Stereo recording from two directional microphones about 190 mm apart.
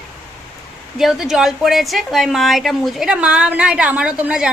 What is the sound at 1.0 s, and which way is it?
A woman's voice, centre (ahead or behind).